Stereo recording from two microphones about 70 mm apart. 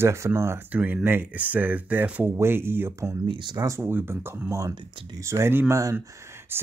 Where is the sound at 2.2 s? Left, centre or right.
Right.